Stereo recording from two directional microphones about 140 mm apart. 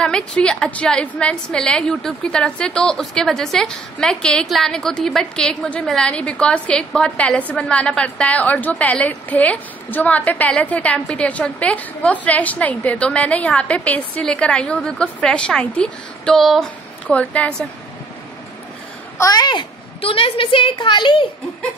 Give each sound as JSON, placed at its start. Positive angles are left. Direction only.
{"t": 0.0, "sound": "a woman's voice", "side_deg": 5}
{"t": 19.1, "sound": "a child's voice", "side_deg": 25}